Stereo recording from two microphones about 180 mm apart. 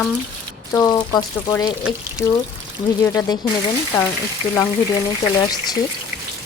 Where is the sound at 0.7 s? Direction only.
20° left (ahead or behind).